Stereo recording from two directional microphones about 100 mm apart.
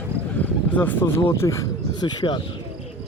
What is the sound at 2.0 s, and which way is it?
Speech, 50° left (ahead or behind).